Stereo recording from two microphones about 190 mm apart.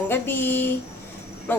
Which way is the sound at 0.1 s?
10° left (ahead or behind).